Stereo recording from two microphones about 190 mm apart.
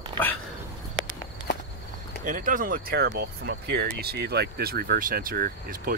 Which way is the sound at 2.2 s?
45° right (ahead or behind).